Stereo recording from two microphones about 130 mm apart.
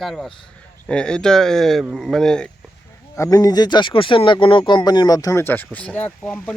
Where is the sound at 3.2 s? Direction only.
25° left (ahead or behind).